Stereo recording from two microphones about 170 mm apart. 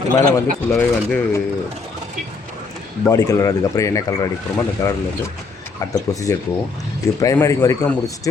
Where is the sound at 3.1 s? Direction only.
20° left (ahead or behind).